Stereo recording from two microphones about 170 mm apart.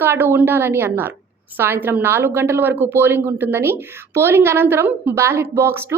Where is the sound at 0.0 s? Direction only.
15° right (ahead or behind).